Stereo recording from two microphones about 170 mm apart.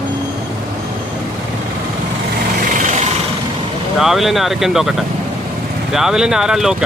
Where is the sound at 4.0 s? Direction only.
Centre (ahead or behind).